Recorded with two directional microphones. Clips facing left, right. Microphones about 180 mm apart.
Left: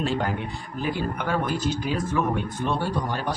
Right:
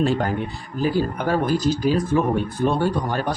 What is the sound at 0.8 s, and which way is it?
Speech, 35° right (ahead or behind).